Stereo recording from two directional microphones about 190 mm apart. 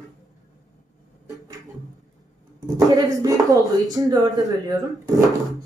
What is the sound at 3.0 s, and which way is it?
Speech, 20° right (ahead or behind).